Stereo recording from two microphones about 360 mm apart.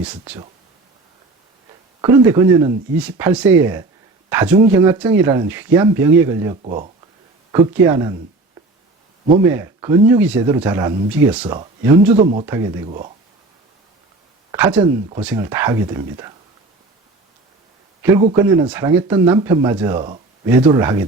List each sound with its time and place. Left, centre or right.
0.0 s speech: centre
2.0 s speech: centre
9.4 s speech: centre
14.5 s speech: centre
18.0 s speech: centre